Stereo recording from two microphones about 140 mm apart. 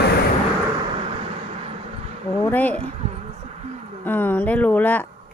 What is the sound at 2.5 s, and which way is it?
Speech, 15° left (ahead or behind).